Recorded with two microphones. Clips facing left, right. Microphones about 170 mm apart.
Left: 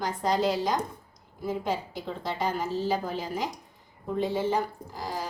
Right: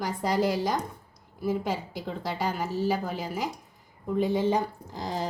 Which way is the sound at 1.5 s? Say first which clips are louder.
Even; 10° right (ahead or behind).